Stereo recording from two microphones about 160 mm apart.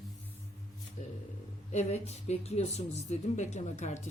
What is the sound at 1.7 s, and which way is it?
Speech, 45° left (ahead or behind).